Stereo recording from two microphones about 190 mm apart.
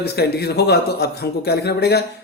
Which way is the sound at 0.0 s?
55° left (ahead or behind).